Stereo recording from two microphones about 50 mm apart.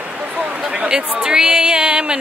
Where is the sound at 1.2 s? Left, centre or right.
Centre.